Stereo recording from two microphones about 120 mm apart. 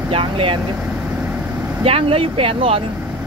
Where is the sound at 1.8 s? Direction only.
55° right (ahead or behind).